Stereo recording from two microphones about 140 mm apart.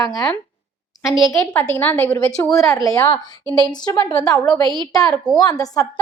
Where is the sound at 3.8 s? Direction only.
30° left (ahead or behind).